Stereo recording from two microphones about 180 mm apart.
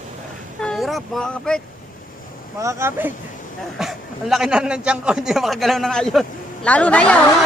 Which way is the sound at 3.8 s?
Centre (ahead or behind).